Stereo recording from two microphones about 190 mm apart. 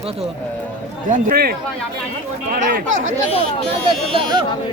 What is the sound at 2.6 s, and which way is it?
Speech, 40° right (ahead or behind).